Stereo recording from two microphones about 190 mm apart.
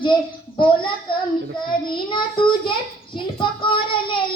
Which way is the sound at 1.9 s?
25° left (ahead or behind).